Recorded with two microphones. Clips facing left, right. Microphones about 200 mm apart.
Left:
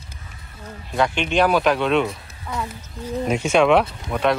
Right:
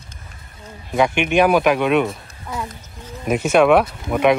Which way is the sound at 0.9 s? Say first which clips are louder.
Right 3 dB; 10° right (ahead or behind).